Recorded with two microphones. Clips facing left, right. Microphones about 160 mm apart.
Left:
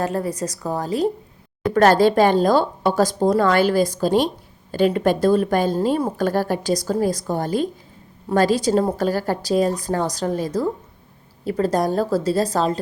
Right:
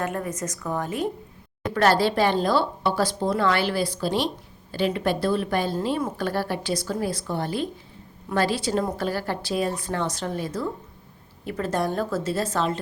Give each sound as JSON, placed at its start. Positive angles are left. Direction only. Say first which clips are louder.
{"t": 0.0, "sound": "a woman's voice", "louder": "left 5 dB", "side_deg": 35}
{"t": 1.7, "sound": "a woman's voice", "louder": "left 6 dB", "side_deg": 45}